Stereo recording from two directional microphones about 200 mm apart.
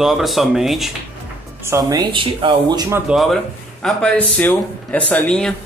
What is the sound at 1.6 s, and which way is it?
Speech, 15° right (ahead or behind).